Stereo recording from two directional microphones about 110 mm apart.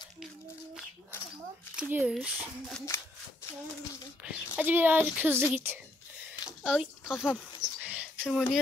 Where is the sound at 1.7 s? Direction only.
10° right (ahead or behind).